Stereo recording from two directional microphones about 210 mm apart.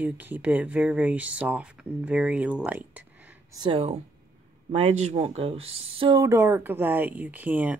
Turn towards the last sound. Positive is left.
turn(degrees=-10)  # may be behind; listen again after turning